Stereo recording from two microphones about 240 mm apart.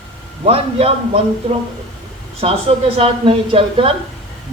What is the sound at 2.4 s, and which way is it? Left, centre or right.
Speech, right.